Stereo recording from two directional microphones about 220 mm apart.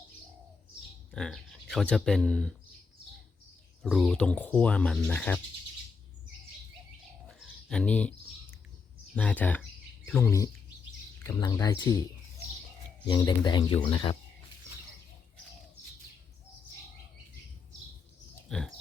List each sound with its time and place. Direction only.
1.1 s speech: centre (ahead or behind)
3.8 s speech: centre (ahead or behind)
7.3 s bird: centre (ahead or behind)
9.1 s speech: 5° left (ahead or behind)
13.1 s speech: 20° left (ahead or behind)
18.4 s pig: centre (ahead or behind)